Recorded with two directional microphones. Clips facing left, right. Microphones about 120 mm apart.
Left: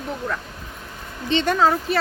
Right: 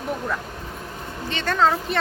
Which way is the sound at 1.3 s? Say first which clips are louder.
Left 7 dB; 20° left (ahead or behind).